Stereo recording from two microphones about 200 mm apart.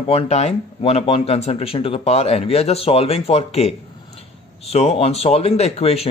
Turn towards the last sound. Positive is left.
turn(degrees=30)  # may be behind; listen again after turning